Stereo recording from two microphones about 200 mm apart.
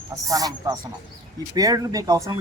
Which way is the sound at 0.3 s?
15° right (ahead or behind).